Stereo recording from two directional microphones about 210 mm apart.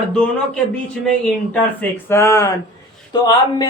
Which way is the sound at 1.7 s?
10° left (ahead or behind).